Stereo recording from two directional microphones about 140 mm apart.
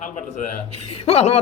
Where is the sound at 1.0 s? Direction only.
45° left (ahead or behind).